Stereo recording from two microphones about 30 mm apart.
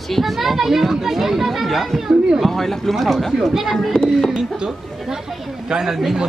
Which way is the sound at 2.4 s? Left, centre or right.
Centre.